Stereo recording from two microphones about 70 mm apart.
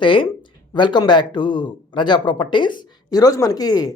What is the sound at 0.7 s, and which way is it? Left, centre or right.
Speech, left.